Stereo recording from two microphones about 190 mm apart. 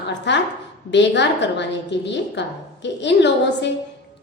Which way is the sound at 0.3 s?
65° left (ahead or behind).